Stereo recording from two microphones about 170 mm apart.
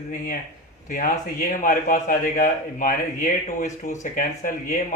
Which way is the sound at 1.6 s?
55° left (ahead or behind).